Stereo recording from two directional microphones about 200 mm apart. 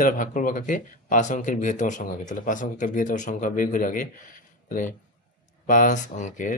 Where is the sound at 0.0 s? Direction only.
40° left (ahead or behind).